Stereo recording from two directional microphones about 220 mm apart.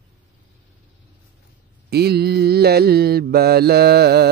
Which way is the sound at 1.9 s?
45° right (ahead or behind).